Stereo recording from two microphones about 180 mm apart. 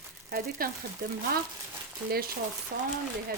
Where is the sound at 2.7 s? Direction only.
55° right (ahead or behind).